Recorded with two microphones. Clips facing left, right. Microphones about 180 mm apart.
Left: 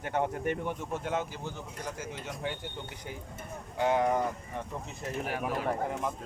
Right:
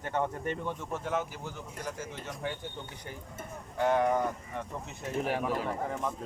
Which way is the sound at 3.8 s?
15° left (ahead or behind).